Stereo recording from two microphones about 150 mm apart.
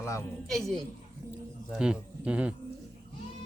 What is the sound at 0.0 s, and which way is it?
Speech, 20° left (ahead or behind).